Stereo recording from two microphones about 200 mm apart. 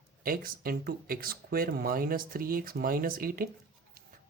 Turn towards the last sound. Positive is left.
turn(degrees=-45)  # may be behind; listen again after turning